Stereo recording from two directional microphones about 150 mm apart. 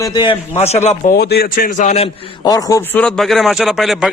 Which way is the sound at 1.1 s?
90° left.